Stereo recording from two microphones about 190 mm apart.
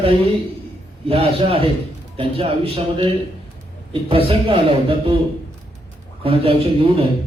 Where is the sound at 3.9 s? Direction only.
30° right (ahead or behind).